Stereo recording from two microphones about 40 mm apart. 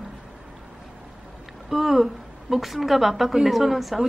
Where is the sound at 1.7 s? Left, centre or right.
Centre.